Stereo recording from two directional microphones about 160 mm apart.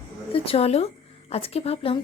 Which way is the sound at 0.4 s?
40° left (ahead or behind).